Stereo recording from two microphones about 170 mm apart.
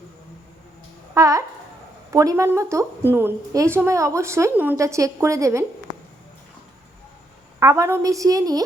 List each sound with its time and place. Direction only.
1.1 s a woman's voice: 20° right (ahead or behind)
7.6 s a woman's voice: 20° right (ahead or behind)